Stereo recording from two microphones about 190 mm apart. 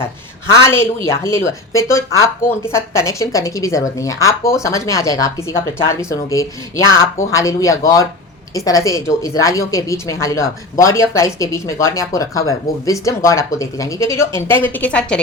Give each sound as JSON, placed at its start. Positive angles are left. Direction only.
{"t": 0.5, "sound": "speech", "side_deg": 15}